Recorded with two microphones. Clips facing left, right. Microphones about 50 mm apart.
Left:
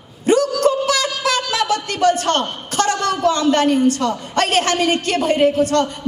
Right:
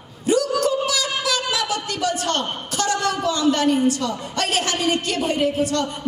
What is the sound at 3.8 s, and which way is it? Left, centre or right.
A woman's voice, left.